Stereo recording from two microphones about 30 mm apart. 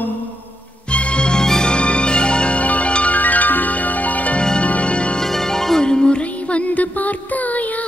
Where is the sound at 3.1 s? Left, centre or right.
Left.